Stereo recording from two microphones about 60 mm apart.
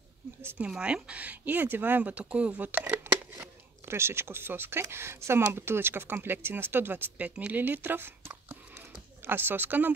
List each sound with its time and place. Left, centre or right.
0.6 s speech: centre; by 3.2 s right
3.3 s speech: right